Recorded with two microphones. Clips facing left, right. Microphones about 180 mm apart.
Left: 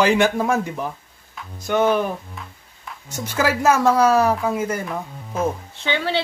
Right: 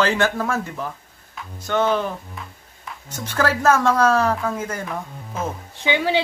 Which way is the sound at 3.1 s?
10° left (ahead or behind).